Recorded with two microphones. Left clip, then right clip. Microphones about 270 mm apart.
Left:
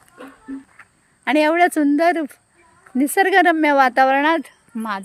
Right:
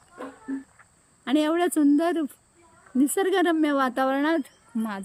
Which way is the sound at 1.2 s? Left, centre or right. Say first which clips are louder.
Left 8 dB; centre.